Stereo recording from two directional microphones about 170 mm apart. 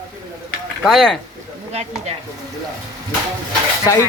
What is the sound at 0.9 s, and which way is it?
Speech, centre (ahead or behind).